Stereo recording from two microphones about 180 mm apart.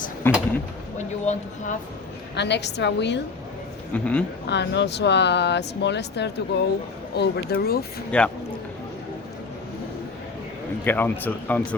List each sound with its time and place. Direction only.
1.2 s speech: 40° left (ahead or behind)
2.3 s speech: 70° left (ahead or behind)
3.9 s speech: 5° left (ahead or behind)
4.4 s speech: 70° left (ahead or behind)
8.1 s speech: 5° left (ahead or behind)
10.8 s speech: 10° left (ahead or behind)